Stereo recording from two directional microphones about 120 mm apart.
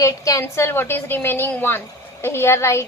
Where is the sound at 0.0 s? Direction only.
30° left (ahead or behind).